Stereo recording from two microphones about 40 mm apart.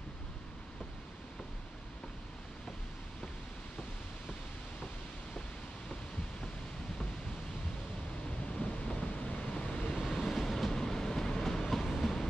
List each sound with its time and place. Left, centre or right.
8.5 s thunder: left
9.2 s vehicle: left
9.9 s vehicle: centre
10.7 s train: centre
11.9 s train: centre